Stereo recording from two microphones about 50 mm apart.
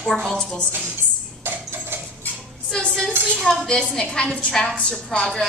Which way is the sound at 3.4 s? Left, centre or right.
Centre.